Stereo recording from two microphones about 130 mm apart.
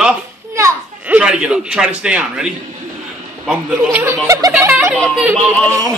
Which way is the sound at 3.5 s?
15° right (ahead or behind).